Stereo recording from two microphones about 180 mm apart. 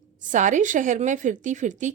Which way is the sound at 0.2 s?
45° right (ahead or behind).